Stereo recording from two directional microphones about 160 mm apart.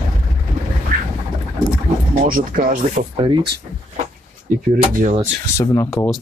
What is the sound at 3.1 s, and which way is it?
Speech, 35° right (ahead or behind).